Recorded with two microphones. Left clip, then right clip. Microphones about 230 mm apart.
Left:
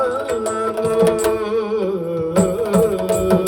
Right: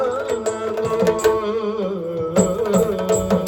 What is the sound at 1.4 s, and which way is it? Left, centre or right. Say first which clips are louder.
Music: left 2 dB; left.